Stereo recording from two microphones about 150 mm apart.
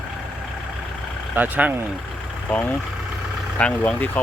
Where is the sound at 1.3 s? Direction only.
10° right (ahead or behind).